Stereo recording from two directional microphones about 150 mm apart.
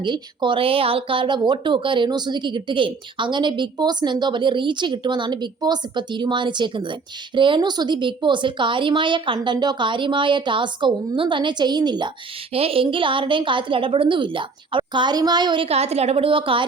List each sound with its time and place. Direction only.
0.0 s speech: 30° right (ahead or behind)